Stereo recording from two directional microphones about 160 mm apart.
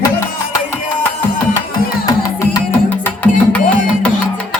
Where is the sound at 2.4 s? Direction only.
20° left (ahead or behind).